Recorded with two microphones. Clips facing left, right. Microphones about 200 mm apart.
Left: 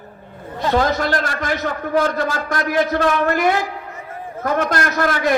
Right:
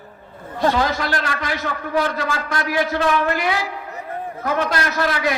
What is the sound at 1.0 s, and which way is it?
A man's voice, 45° left (ahead or behind).